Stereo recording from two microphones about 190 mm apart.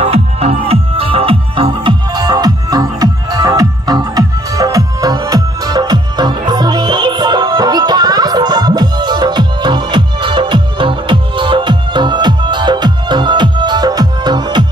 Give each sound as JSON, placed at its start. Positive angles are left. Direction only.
{"t": 0.0, "sound": "music", "side_deg": -30}